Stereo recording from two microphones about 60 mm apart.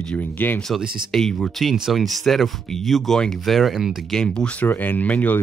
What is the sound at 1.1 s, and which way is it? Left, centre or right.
Speech, centre.